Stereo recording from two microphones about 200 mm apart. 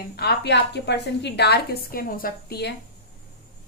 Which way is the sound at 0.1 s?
55° left (ahead or behind).